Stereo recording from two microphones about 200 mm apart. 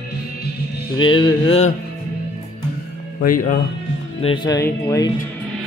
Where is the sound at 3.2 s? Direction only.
40° left (ahead or behind).